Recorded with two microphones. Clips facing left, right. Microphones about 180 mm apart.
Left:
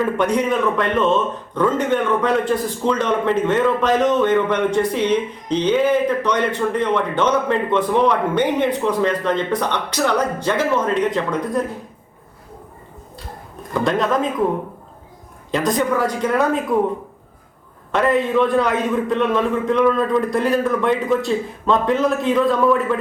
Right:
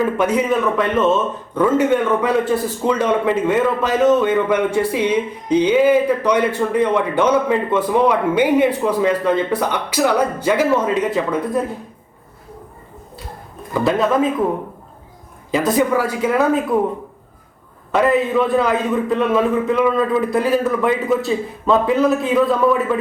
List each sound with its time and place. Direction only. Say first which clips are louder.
0.0 s a man's voice: right 1 dB; 5° right (ahead or behind)
13.7 s a man's voice: right 2 dB; 5° right (ahead or behind)
15.5 s a man's voice: right 2 dB; 5° right (ahead or behind)
17.9 s a man's voice: right 1 dB; 5° right (ahead or behind)